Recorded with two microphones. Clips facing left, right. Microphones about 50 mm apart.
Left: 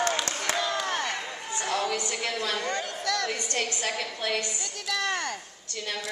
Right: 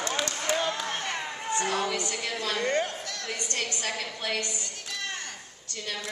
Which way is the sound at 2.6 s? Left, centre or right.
Right.